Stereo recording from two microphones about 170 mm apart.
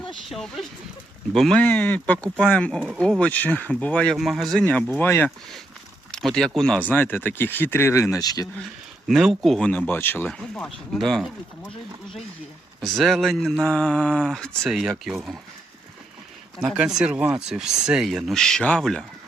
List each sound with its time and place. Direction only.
0.3 s speech: centre (ahead or behind)
4.6 s speech: 10° left (ahead or behind)
9.0 s speech: centre (ahead or behind)
12.8 s speech: centre (ahead or behind)
16.6 s speech: 5° right (ahead or behind)